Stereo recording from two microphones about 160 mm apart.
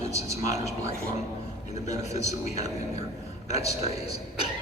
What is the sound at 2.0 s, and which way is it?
Speech, 45° left (ahead or behind).